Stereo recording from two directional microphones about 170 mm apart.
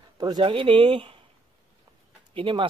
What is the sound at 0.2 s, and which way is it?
Speech, 25° right (ahead or behind).